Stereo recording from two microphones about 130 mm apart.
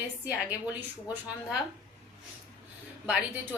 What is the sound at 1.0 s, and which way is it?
Speech, 10° right (ahead or behind).